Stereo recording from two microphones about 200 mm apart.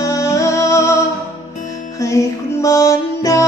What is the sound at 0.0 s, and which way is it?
Music, 15° left (ahead or behind).